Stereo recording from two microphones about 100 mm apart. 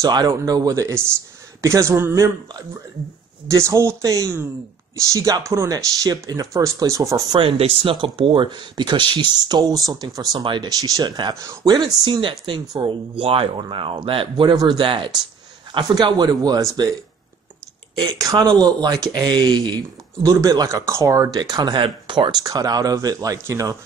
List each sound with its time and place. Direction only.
0.0 s a man's voice: 45° right (ahead or behind); by 2.3 s 25° right (ahead or behind)
3.4 s speech: 30° right (ahead or behind)
7.3 s speech: 70° right (ahead or behind)
7.9 s speech: 60° right (ahead or behind)
13.2 s speech: 65° right (ahead or behind); by 16.9 s 40° right (ahead or behind)
17.9 s speech: 40° right (ahead or behind)
20.2 s speech: 35° right (ahead or behind)
21.4 s speech: 45° right (ahead or behind)
22.4 s speech: 40° right (ahead or behind)